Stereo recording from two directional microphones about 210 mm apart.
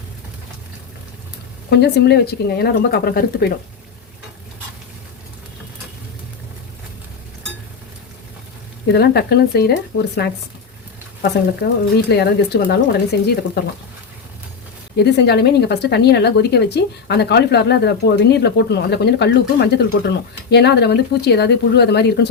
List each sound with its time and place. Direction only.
1.8 s speech: 50° left (ahead or behind)
8.9 s speech: 50° left (ahead or behind)
14.9 s speech: 50° left (ahead or behind)